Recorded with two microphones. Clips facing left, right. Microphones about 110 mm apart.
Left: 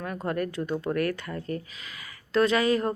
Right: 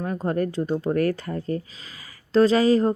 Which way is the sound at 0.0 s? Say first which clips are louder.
Right 5 dB; 30° right (ahead or behind).